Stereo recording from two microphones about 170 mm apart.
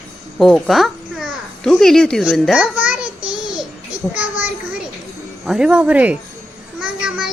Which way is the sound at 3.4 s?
5° right (ahead or behind).